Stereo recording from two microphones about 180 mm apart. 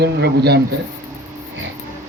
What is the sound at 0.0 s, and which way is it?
Speech, 65° right (ahead or behind).